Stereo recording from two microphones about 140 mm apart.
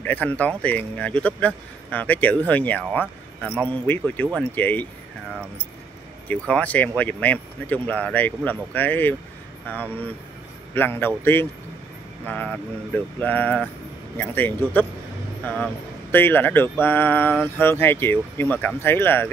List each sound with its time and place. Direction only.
0.0 s speech: 10° left (ahead or behind)
6.2 s speech: 10° left (ahead or behind)